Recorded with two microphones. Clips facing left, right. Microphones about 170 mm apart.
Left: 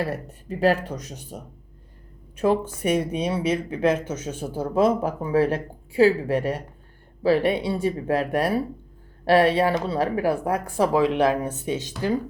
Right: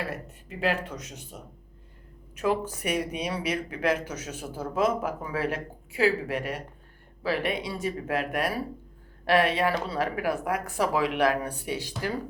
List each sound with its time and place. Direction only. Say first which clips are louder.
0.1 s speech: left 6 dB; 40° left (ahead or behind)
2.3 s speech: left 5 dB; 30° left (ahead or behind)